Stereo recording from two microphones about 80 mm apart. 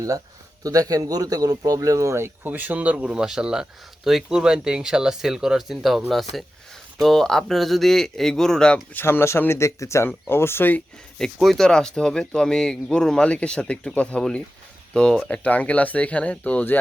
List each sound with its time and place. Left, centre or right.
0.6 s speech: right; by 9.0 s centre
9.0 s speech: left
11.3 s speech: centre